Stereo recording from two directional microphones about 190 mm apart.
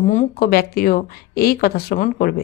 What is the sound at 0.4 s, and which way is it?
Speech, 50° left (ahead or behind).